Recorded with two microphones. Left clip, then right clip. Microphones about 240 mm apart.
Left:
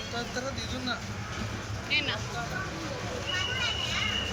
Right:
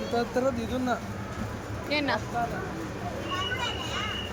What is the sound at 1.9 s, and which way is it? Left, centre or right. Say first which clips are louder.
Speech: right 2 dB; right.